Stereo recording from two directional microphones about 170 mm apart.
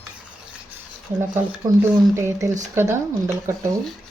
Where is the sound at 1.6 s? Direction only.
15° right (ahead or behind).